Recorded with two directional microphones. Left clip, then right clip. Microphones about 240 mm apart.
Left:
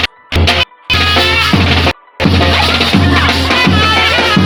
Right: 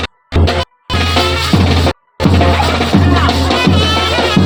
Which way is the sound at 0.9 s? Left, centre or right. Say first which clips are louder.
Left 4 dB; centre.